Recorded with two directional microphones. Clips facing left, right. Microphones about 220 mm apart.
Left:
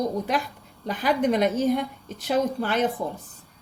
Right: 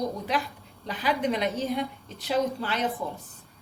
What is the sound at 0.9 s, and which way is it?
A woman's voice, 50° left (ahead or behind).